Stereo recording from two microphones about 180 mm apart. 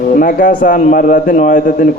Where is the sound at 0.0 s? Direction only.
50° left (ahead or behind).